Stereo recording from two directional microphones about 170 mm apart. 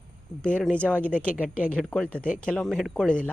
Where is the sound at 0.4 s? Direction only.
5° left (ahead or behind).